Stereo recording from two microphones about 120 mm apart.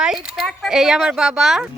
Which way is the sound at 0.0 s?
5° right (ahead or behind).